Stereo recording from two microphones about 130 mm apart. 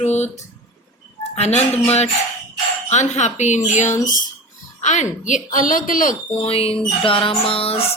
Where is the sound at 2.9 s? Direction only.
65° left (ahead or behind); by 6.1 s 90° left.